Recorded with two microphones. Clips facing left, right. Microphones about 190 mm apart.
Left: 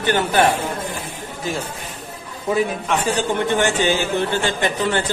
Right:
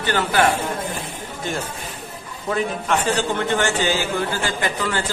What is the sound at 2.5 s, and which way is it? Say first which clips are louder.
A man's voice: left 2 dB; 10° left (ahead or behind).